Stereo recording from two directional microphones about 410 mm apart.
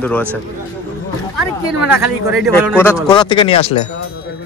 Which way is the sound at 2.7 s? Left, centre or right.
Centre.